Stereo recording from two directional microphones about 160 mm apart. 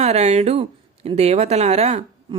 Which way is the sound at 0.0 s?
40° right (ahead or behind).